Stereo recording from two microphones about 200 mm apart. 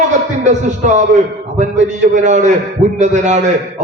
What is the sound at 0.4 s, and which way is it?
A man's voice, 35° right (ahead or behind).